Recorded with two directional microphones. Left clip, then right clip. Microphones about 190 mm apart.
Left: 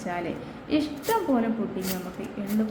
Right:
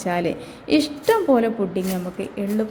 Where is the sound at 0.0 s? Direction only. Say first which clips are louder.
Right 8 dB; 35° right (ahead or behind).